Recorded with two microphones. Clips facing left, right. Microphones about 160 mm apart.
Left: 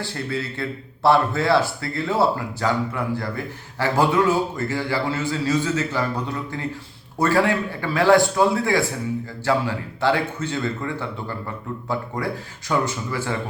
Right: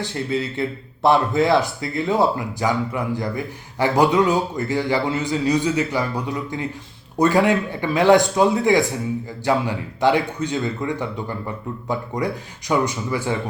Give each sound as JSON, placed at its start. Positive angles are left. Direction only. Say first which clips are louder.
{"t": 0.0, "sound": "a man's voice", "louder": "right 4 dB", "side_deg": -20}